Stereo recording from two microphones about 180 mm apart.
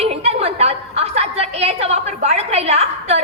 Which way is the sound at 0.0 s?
35° right (ahead or behind).